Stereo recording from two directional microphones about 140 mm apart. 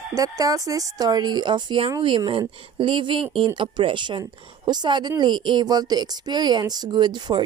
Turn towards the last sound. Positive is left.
turn(degrees=-35)  # may be behind; listen again after turning